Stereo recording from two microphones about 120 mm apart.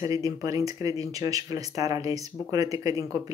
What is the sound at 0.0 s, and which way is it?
Speech, 30° right (ahead or behind).